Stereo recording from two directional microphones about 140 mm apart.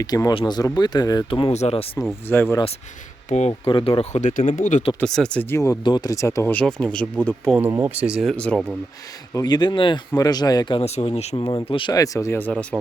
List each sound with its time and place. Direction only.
0.0 s speech: 25° left (ahead or behind); by 1.9 s 45° left (ahead or behind)
2.2 s speech: 15° left (ahead or behind)
3.2 s speech: 55° left (ahead or behind)
3.7 s speech: 35° left (ahead or behind)
4.1 s speech: 60° left (ahead or behind)
4.9 s speech: 5° left (ahead or behind)
5.8 s speech: 30° left (ahead or behind); by 7.5 s 10° left (ahead or behind)
7.8 s speech: 10° right (ahead or behind); by 8.6 s 5° left (ahead or behind)
9.3 s speech: 30° left (ahead or behind)
10.8 s speech: 50° left (ahead or behind)
11.4 s speech: 35° left (ahead or behind)
11.9 s speech: 25° left (ahead or behind)